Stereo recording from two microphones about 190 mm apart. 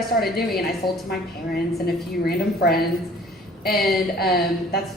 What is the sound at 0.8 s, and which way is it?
Speech, 25° left (ahead or behind).